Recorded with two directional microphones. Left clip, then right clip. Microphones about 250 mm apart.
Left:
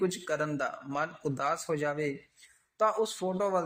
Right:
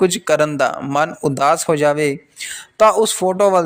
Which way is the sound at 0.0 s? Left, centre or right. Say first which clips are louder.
Right 16 dB; right.